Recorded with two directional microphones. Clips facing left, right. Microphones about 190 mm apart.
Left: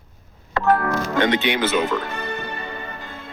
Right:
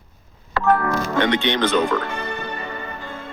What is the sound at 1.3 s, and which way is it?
Speech, 10° left (ahead or behind).